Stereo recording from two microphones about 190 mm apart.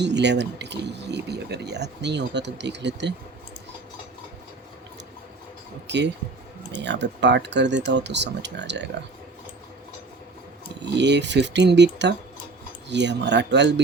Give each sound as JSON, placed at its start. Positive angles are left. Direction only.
{"t": 0.0, "sound": "speech", "side_deg": -65}
{"t": 5.9, "sound": "speech", "side_deg": -65}
{"t": 10.8, "sound": "speech", "side_deg": -65}